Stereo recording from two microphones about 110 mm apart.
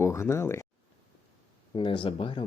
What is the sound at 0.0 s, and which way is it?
Speech, 25° left (ahead or behind).